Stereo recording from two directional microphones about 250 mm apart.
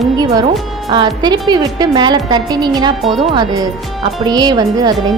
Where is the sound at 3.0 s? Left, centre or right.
Centre.